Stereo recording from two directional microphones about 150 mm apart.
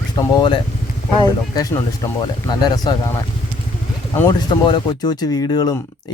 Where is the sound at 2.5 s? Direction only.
30° left (ahead or behind).